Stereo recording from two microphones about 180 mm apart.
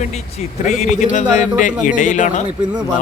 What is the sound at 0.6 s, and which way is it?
Speech, 40° left (ahead or behind).